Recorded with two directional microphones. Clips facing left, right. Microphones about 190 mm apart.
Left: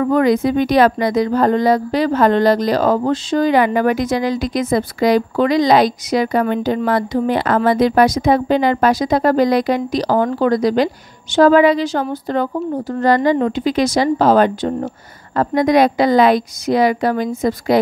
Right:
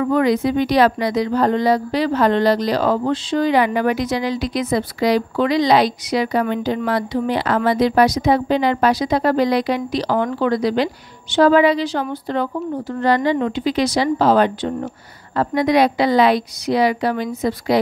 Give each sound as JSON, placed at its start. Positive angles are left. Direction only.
{"t": 0.0, "sound": "speech", "side_deg": 45}